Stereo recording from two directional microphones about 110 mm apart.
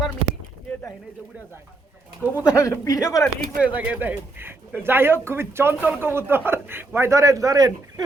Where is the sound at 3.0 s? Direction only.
5° right (ahead or behind); by 8.0 s 35° right (ahead or behind).